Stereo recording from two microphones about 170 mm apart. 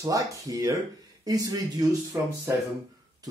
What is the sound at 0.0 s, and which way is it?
Speech, 20° right (ahead or behind).